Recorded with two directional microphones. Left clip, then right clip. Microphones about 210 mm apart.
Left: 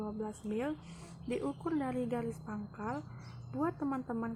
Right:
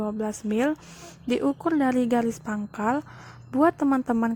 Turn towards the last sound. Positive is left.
turn(degrees=-45)  # may be behind; listen again after turning